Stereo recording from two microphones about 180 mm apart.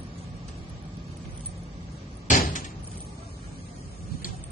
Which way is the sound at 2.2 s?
45° left (ahead or behind).